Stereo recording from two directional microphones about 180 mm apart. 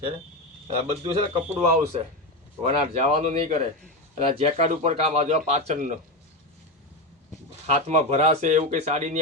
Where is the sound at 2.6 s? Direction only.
35° right (ahead or behind).